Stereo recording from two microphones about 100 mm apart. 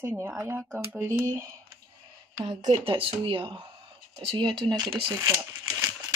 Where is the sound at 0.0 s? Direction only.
25° right (ahead or behind).